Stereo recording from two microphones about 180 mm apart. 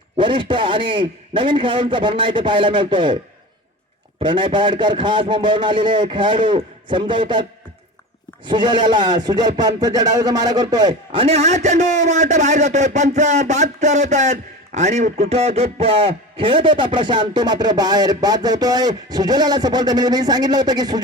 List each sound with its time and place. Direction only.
0.2 s speech: 25° right (ahead or behind)
4.2 s speech: 25° right (ahead or behind)
8.4 s speech: 25° right (ahead or behind)